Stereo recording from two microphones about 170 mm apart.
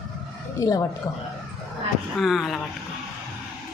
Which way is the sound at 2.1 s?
Centre (ahead or behind).